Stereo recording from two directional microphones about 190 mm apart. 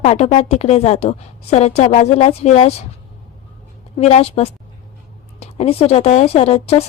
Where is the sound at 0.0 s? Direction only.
35° left (ahead or behind).